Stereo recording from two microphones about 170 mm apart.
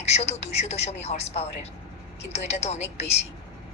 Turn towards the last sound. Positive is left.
turn(degrees=40)  # may be behind; listen again after turning